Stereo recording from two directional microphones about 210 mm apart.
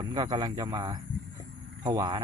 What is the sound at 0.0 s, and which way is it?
Speech, 20° right (ahead or behind).